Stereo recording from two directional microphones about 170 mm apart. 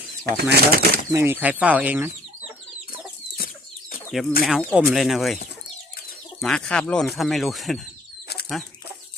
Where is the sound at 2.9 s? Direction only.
60° left (ahead or behind).